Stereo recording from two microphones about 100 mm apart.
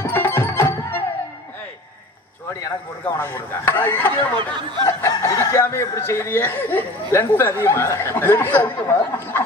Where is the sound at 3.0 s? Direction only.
25° left (ahead or behind).